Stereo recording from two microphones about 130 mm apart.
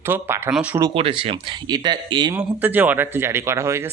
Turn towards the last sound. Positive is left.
turn(degrees=-20)  # may be behind; listen again after turning